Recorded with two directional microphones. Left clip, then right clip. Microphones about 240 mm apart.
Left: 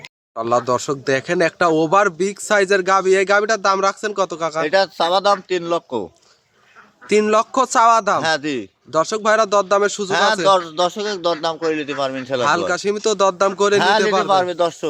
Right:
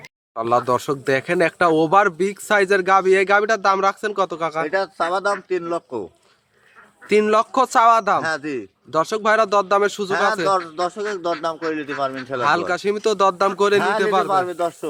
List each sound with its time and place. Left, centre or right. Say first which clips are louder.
0.0 s speech: left 1 dB; centre
4.7 s a man's voice: left 5 dB; left
7.1 s speech: left 1 dB; centre
8.2 s a man's voice: left 4 dB; left
8.9 s speech: left 2 dB; centre
10.1 s a man's voice: left 6 dB; left
12.4 s speech: left 1 dB; centre
14.3 s a man's voice: left 4 dB; left